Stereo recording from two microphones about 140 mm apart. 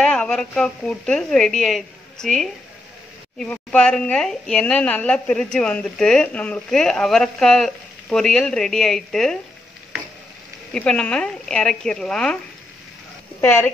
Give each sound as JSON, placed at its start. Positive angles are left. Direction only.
{"t": 0.0, "sound": "a woman's voice", "side_deg": 5}
{"t": 10.7, "sound": "a woman's voice", "side_deg": 5}
{"t": 13.4, "sound": "a woman's voice", "side_deg": 15}